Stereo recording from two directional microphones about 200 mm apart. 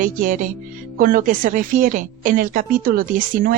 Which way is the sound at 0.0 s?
40° right (ahead or behind).